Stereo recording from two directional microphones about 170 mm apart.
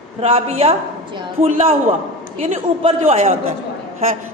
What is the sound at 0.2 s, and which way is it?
A man's voice, 35° right (ahead or behind).